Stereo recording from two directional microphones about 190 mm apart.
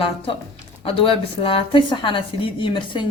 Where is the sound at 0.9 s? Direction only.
30° left (ahead or behind).